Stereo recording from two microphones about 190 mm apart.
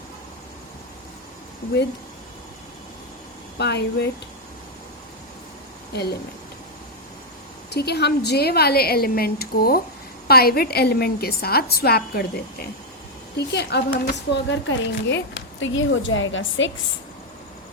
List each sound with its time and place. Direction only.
3.6 s speech: 60° left (ahead or behind)
5.9 s speech: 60° left (ahead or behind)
7.7 s speech: 60° left (ahead or behind)
13.5 s a woman's voice: 60° left (ahead or behind); by 16.7 s 80° left